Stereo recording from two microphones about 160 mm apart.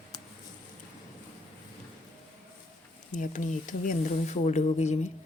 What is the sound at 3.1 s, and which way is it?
Speech, 55° left (ahead or behind).